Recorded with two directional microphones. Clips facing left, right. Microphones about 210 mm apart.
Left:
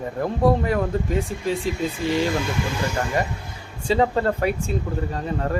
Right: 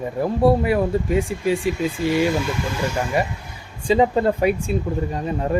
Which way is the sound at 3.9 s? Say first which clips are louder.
Right 3 dB; 15° right (ahead or behind).